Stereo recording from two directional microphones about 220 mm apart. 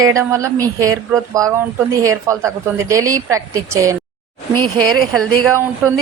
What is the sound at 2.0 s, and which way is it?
Speech, 15° right (ahead or behind).